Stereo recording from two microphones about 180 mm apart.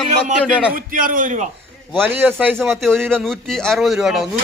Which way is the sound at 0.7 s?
50° right (ahead or behind).